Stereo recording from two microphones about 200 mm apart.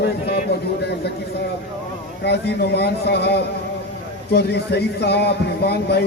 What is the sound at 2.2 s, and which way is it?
A man's voice, 55° left (ahead or behind).